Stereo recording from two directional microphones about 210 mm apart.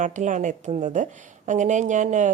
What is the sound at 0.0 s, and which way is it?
A woman's voice, 35° right (ahead or behind).